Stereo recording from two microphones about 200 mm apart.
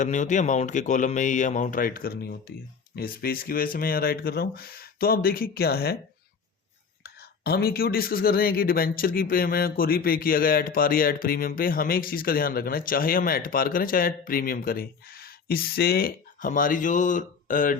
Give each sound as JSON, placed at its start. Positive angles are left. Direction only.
{"t": 0.0, "sound": "speech", "side_deg": 40}
{"t": 7.0, "sound": "speech", "side_deg": 50}